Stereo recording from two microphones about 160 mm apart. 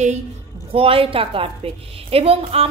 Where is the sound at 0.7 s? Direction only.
35° right (ahead or behind).